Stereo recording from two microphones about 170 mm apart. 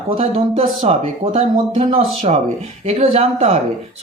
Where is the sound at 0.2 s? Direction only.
35° right (ahead or behind).